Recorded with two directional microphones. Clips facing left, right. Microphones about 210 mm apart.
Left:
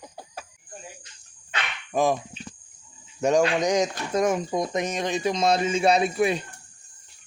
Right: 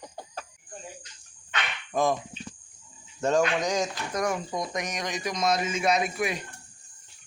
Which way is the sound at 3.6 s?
20° left (ahead or behind).